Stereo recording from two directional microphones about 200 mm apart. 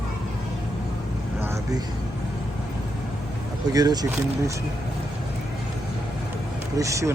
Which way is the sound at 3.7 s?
20° right (ahead or behind).